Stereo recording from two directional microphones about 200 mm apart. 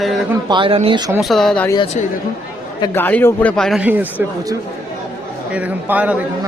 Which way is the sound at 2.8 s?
10° left (ahead or behind).